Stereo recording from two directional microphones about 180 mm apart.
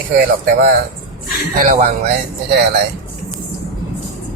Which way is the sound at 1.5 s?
50° right (ahead or behind).